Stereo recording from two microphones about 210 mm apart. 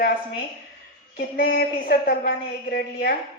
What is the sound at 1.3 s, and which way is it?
Speech, 45° left (ahead or behind).